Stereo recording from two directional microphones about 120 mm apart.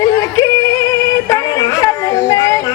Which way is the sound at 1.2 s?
30° left (ahead or behind).